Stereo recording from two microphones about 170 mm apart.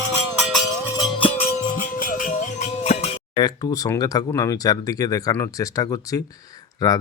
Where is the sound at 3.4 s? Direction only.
20° left (ahead or behind).